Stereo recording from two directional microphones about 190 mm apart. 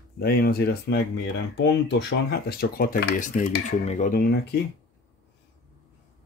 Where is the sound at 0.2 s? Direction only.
55° left (ahead or behind); by 4.1 s 40° left (ahead or behind).